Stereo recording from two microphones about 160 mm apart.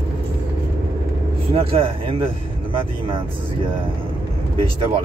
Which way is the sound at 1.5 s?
35° right (ahead or behind).